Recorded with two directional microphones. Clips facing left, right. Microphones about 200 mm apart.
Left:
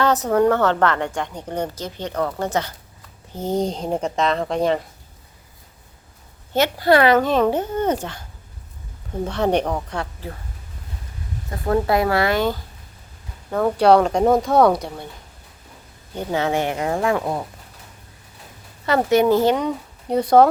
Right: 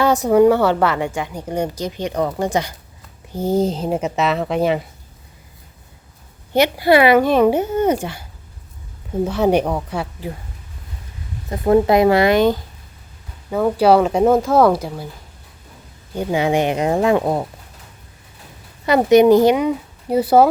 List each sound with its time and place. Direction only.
0.0 s a woman's voice: 10° right (ahead or behind)
6.5 s a woman's voice: 10° right (ahead or behind)
9.2 s a woman's voice: 5° right (ahead or behind)
11.5 s speech: 20° right (ahead or behind)
13.5 s speech: 5° right (ahead or behind)
16.1 s speech: 10° right (ahead or behind)
18.9 s a woman's voice: 15° right (ahead or behind)